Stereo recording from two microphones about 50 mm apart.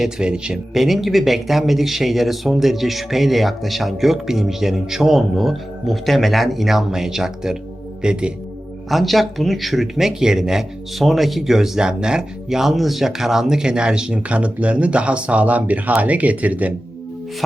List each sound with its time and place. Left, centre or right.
0.0 s speech: centre
0.7 s speech: centre
8.0 s speech: centre
8.9 s speech: centre; by 16.7 s right